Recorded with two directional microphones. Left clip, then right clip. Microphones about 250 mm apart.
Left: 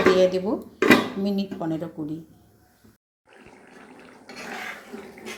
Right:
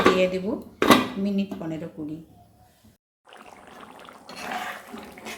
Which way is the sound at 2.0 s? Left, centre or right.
Centre.